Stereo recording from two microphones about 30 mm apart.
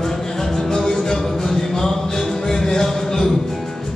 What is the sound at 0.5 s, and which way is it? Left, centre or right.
Music, centre.